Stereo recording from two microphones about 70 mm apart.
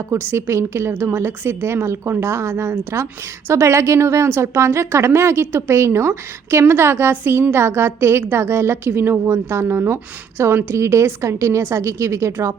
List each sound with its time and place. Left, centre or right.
0.1 s a woman's voice: right